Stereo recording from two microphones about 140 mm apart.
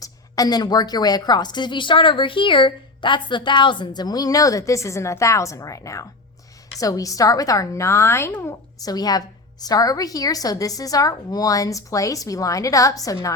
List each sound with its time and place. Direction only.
0.0 s a woman's voice: 25° left (ahead or behind)